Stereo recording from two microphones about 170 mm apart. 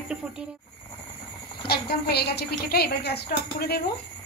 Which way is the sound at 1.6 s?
70° left (ahead or behind).